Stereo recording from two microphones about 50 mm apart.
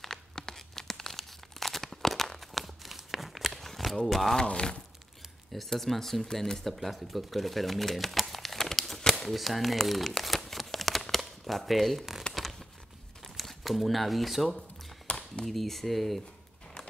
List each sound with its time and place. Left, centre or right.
0.0 s tearing: centre
4.4 s speech: centre
5.5 s speech: centre
12.4 s a sound: centre
13.4 s speech: centre
15.0 s a sound: centre
15.4 s speech: centre